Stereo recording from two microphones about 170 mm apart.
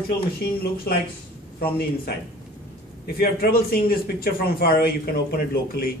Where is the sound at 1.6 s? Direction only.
65° left (ahead or behind).